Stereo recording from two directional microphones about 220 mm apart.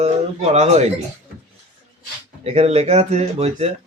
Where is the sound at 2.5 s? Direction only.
30° right (ahead or behind).